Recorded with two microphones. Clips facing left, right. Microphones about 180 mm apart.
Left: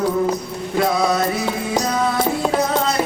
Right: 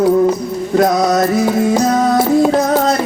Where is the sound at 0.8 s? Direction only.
45° right (ahead or behind).